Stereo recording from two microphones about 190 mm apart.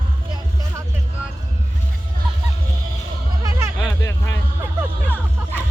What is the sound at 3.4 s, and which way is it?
Music, 15° right (ahead or behind).